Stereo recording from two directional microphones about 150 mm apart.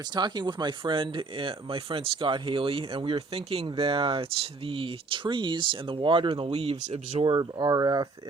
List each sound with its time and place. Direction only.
0.1 s speech: 30° right (ahead or behind)
7.3 s speech: 25° right (ahead or behind)